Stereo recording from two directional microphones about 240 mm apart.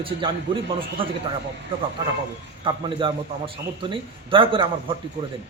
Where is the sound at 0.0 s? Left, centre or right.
Right.